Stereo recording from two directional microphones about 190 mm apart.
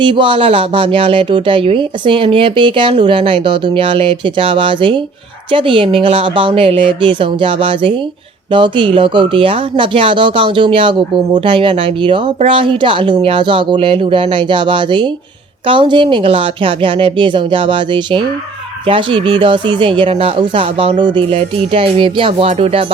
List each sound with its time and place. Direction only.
0.0 s speech: 25° right (ahead or behind)